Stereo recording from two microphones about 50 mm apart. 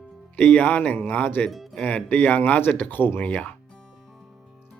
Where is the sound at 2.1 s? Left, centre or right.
Left.